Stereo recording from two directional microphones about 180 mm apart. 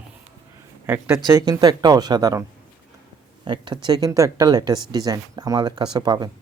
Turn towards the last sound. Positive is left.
turn(degrees=-25)  # may be behind; listen again after turning